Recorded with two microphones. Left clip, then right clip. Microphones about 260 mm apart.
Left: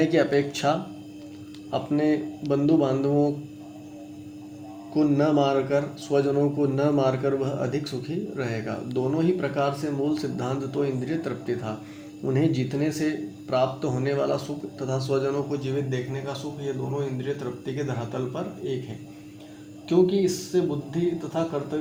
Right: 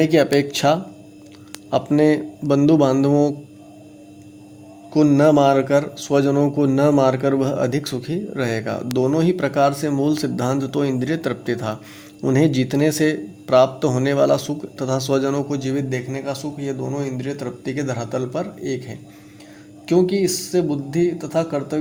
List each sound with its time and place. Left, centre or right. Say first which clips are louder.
0.0 s a man's voice: right 6 dB; right
4.9 s a man's voice: right 8 dB; right
19.9 s a man's voice: right 4 dB; right